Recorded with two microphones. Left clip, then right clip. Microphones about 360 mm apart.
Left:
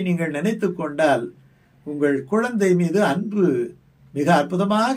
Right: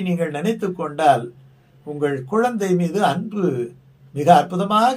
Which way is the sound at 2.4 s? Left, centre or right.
Centre.